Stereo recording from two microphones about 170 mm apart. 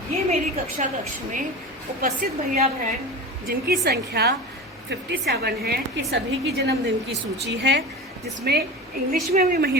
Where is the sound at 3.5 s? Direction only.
65° right (ahead or behind); by 7.8 s 85° right.